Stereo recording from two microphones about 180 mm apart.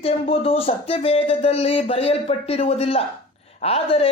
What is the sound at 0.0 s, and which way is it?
A woman's voice, 30° left (ahead or behind).